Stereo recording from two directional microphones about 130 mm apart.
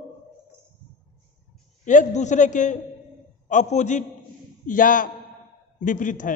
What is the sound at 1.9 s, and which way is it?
A man's voice, 70° left (ahead or behind).